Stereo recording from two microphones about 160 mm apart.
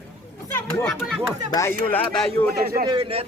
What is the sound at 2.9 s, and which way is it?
Speech, 35° right (ahead or behind).